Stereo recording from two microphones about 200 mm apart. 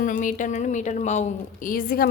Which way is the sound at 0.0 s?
40° left (ahead or behind).